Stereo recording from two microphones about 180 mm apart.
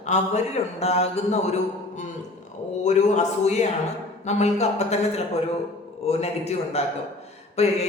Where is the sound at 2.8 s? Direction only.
40° left (ahead or behind).